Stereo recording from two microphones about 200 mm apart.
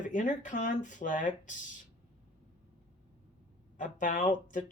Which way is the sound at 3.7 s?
40° left (ahead or behind).